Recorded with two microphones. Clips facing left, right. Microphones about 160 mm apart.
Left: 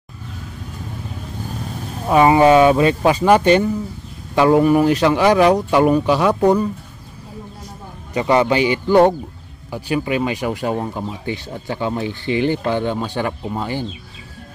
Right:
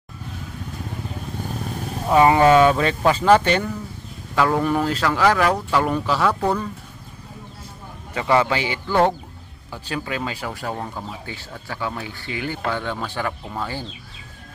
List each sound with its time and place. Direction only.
2.0 s speech: 20° left (ahead or behind)
8.1 s speech: 20° left (ahead or behind)